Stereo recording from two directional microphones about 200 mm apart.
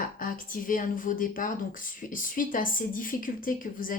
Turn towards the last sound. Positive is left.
turn(degrees=45)  # may be behind; listen again after turning